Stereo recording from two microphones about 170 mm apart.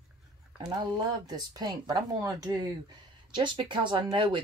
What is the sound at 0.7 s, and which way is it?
Speech, 25° right (ahead or behind).